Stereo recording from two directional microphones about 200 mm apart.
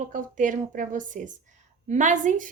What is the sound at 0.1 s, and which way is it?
Speech, 40° right (ahead or behind).